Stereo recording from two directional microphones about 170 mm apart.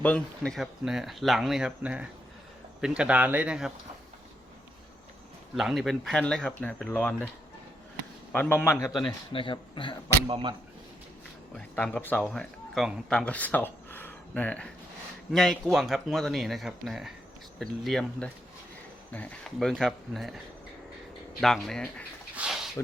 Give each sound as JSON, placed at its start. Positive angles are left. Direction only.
{"t": 0.0, "sound": "speech", "side_deg": 5}
{"t": 5.5, "sound": "speech", "side_deg": 0}
{"t": 8.3, "sound": "speech", "side_deg": 10}
{"t": 9.0, "sound": "speech", "side_deg": 30}
{"t": 10.2, "sound": "speech", "side_deg": -30}
{"t": 11.5, "sound": "speech", "side_deg": 5}
{"t": 21.4, "sound": "speech", "side_deg": 5}
{"t": 22.4, "sound": "a sound", "side_deg": -5}